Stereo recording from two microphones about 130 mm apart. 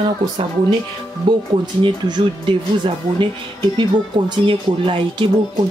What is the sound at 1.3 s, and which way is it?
Speech, 40° right (ahead or behind).